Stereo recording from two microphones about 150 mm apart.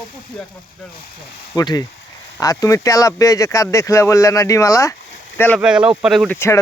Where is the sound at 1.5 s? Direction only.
25° left (ahead or behind).